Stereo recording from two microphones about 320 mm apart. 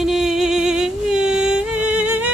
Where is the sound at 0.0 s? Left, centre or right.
Centre.